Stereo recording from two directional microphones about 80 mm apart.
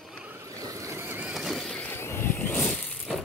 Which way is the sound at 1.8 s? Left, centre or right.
Left.